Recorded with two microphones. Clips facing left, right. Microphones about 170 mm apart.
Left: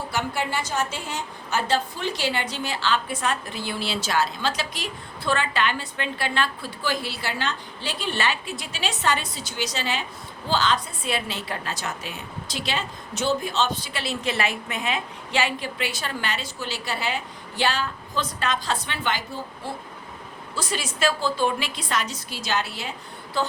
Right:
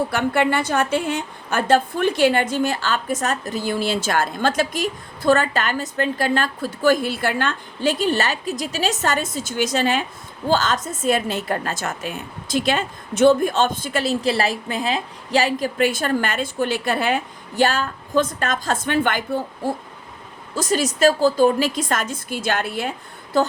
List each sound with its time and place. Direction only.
0.1 s a woman's voice: 60° right (ahead or behind)